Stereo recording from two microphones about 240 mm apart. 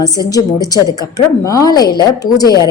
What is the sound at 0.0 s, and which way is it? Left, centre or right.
A woman's voice, centre.